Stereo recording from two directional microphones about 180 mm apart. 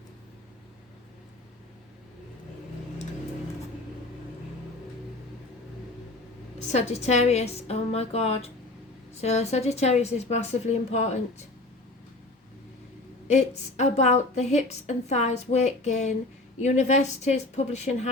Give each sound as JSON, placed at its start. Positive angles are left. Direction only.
{"t": 6.7, "sound": "a woman's voice", "side_deg": 40}
{"t": 13.2, "sound": "a woman's voice", "side_deg": 40}